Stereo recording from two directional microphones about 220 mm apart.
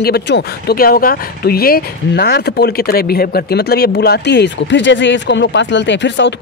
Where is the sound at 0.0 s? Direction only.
45° left (ahead or behind).